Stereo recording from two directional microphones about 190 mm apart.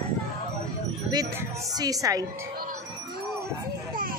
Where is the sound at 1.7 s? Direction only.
20° right (ahead or behind).